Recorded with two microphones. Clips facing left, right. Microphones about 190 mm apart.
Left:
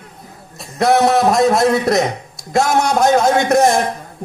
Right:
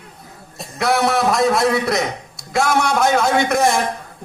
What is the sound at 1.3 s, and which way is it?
Speech, 20° left (ahead or behind).